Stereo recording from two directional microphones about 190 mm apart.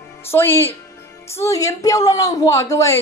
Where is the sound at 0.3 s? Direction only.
10° left (ahead or behind).